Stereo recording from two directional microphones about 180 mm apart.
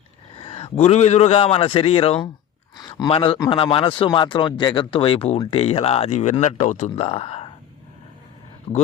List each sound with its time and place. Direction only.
0.3 s a man's voice: 30° left (ahead or behind)
3.3 s speech: 20° left (ahead or behind)
3.6 s speech: 30° left (ahead or behind)